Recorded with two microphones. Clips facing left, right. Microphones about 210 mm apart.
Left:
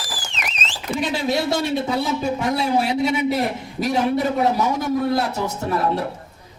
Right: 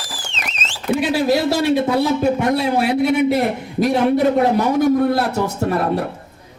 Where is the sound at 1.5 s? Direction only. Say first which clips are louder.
Right 5 dB; 55° right (ahead or behind).